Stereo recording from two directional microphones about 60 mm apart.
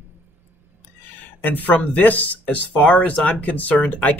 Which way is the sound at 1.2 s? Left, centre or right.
Left.